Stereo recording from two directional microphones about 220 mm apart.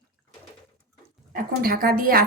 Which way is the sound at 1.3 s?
40° right (ahead or behind).